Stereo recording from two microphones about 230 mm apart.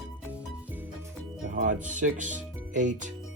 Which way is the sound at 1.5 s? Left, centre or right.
Right.